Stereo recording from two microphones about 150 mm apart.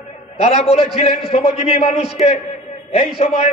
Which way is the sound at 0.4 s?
45° left (ahead or behind).